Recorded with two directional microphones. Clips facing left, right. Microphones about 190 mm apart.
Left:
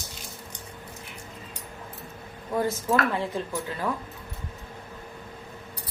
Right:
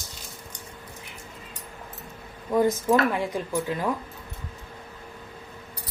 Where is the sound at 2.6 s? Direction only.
15° right (ahead or behind).